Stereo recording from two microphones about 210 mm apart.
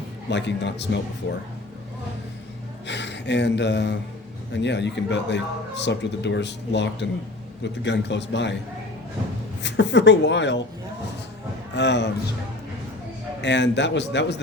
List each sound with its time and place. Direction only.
0.3 s speech: 55° left (ahead or behind)
2.8 s speech: 55° left (ahead or behind)
9.6 s speech: 55° left (ahead or behind)
11.7 s speech: 55° left (ahead or behind)
13.4 s speech: 55° left (ahead or behind)